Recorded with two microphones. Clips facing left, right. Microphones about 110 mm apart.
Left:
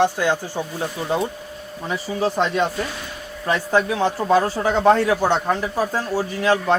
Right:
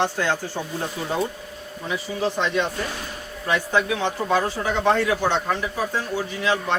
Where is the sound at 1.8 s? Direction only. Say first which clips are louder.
Left 3 dB; 40° left (ahead or behind).